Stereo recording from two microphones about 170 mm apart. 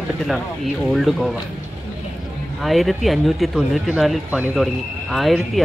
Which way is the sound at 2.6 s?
Centre (ahead or behind).